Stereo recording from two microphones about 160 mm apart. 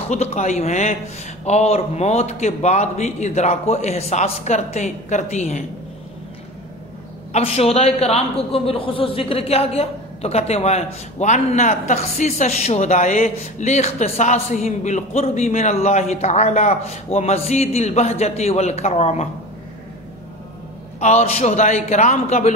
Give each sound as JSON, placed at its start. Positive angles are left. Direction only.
{"t": 0.1, "sound": "a man's voice", "side_deg": 45}
{"t": 7.3, "sound": "a man's voice", "side_deg": 40}
{"t": 21.0, "sound": "a man's voice", "side_deg": 40}